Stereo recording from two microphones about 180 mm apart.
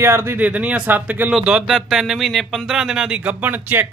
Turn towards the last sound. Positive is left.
turn(degrees=-10)  # may be behind; listen again after turning